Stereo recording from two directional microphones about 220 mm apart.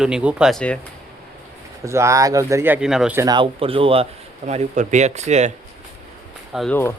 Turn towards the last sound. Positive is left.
turn(degrees=0)  # may be behind; listen again after turning